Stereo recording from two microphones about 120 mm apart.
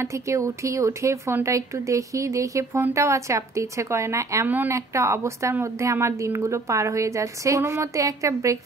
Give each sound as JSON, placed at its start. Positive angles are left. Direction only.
{"t": 0.0, "sound": "a woman's voice", "side_deg": -25}
{"t": 4.5, "sound": "a woman's voice", "side_deg": -15}